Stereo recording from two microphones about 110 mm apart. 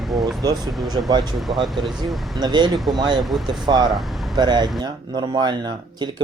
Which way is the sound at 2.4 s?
45° right (ahead or behind).